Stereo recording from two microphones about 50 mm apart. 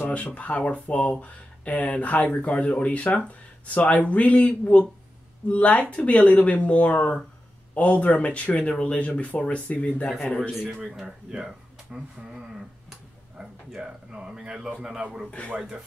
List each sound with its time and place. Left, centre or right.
0.0 s speech: left
10.9 s speech: centre
15.4 s speech: left